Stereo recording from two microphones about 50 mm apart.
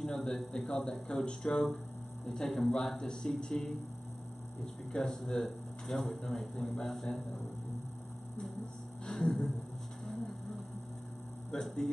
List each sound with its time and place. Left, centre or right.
0.0 s speech: centre
4.9 s speech: centre
9.0 s a sound: centre
11.6 s speech: centre